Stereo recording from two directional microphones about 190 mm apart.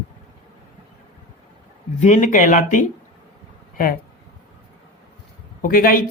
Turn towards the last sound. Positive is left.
turn(degrees=50)  # may be behind; listen again after turning